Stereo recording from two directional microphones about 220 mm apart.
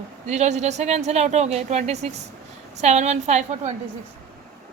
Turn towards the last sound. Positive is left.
turn(degrees=-30)  # may be behind; listen again after turning